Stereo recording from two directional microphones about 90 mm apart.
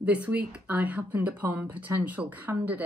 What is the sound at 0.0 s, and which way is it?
Speech, 15° right (ahead or behind).